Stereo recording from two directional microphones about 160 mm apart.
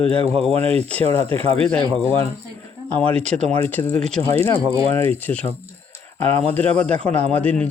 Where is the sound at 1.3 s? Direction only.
35° right (ahead or behind).